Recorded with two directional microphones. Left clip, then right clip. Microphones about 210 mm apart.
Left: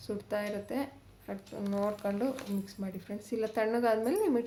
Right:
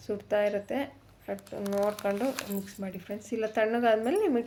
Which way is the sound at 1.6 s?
55° right (ahead or behind).